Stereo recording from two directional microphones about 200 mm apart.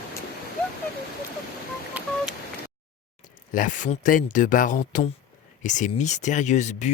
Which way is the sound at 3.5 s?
40° left (ahead or behind).